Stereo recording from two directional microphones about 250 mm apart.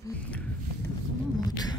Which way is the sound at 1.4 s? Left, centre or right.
Centre.